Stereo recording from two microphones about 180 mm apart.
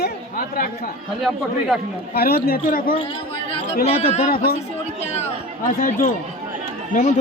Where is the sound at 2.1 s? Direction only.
55° left (ahead or behind).